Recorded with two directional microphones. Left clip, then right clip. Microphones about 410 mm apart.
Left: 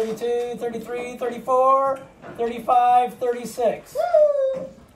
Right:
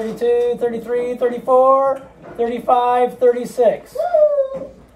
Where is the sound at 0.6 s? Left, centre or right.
Centre.